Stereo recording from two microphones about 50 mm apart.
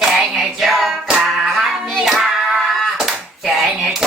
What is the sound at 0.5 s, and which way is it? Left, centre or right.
Speech, centre.